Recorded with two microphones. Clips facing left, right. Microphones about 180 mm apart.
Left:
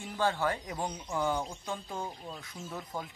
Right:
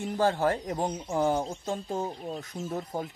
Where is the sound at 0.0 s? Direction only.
40° right (ahead or behind).